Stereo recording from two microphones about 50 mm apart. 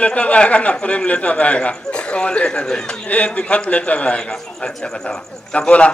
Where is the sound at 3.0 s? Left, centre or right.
Left.